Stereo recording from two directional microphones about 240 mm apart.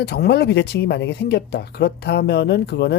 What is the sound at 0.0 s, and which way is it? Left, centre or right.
Speech, left.